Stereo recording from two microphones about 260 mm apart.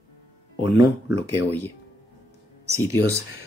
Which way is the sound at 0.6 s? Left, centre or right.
Centre.